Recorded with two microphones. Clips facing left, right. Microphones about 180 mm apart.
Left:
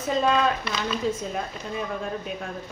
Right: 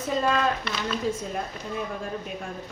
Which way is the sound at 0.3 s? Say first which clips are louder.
Left 2 dB; centre (ahead or behind).